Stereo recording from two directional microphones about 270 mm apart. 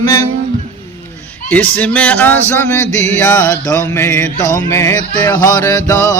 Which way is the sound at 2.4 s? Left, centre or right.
Centre.